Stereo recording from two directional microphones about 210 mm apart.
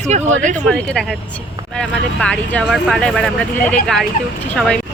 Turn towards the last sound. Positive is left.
turn(degrees=5)  # may be behind; listen again after turning